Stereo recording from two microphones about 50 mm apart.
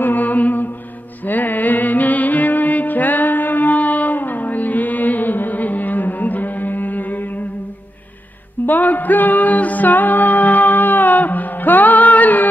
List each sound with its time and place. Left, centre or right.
0.0 s music: left
8.6 s music: left